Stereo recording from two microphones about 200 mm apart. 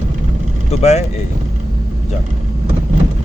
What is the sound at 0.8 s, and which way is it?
Speech, 35° left (ahead or behind).